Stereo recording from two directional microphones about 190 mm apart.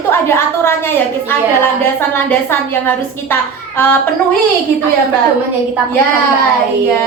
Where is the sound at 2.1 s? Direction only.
10° left (ahead or behind).